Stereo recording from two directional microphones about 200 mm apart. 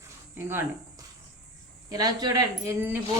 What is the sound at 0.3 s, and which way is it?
Speech, 10° right (ahead or behind).